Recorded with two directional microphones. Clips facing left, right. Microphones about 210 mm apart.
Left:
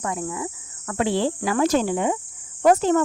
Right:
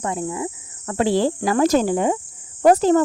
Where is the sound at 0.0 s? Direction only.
30° right (ahead or behind).